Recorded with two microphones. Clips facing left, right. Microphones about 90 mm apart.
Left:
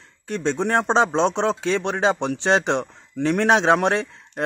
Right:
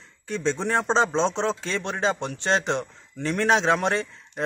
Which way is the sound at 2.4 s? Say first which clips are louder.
Left 4 dB; 80° left.